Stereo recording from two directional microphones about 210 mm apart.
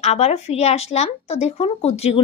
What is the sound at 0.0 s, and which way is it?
A woman's voice, 30° left (ahead or behind).